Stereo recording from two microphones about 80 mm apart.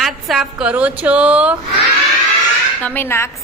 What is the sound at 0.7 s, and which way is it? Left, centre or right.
Speech, centre.